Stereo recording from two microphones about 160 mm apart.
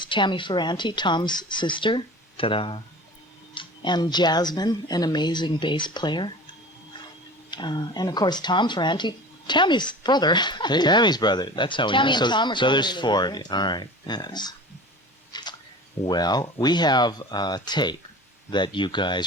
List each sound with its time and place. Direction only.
0.0 s speech: 30° left (ahead or behind)
7.5 s speech: 25° left (ahead or behind)
15.3 s a sound: 25° left (ahead or behind)
16.0 s speech: 25° left (ahead or behind)